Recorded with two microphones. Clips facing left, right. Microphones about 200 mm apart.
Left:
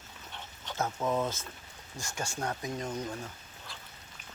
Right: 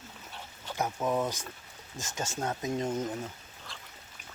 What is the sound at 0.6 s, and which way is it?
Speech, 10° right (ahead or behind).